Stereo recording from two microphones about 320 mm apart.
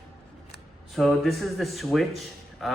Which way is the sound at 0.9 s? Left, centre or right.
Centre.